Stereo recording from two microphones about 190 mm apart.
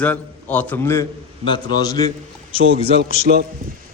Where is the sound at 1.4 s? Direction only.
25° left (ahead or behind).